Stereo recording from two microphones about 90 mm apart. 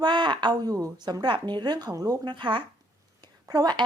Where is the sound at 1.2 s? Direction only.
60° right (ahead or behind).